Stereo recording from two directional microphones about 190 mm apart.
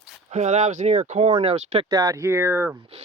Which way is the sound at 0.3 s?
40° right (ahead or behind).